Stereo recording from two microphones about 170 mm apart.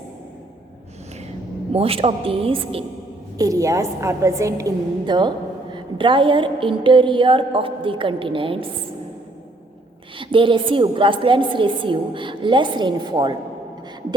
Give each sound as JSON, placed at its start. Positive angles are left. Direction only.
{"t": 1.7, "sound": "speech", "side_deg": -35}
{"t": 3.3, "sound": "a woman's voice", "side_deg": -20}
{"t": 10.2, "sound": "a woman's voice", "side_deg": -30}